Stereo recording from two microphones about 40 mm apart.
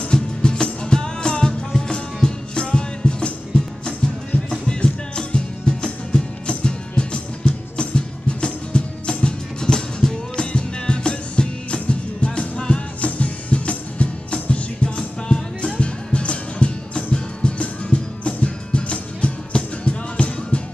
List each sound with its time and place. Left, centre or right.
0.1 s music: left